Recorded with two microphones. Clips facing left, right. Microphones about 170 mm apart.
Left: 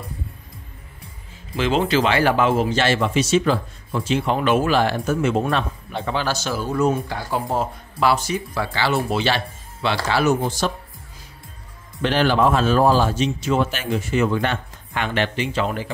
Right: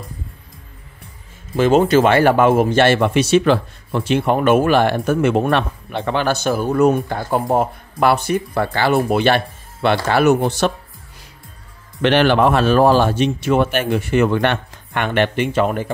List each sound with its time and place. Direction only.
1.6 s speech: 45° right (ahead or behind); by 10.7 s 65° right (ahead or behind)
12.0 s speech: 70° right (ahead or behind); by 15.9 s 55° right (ahead or behind)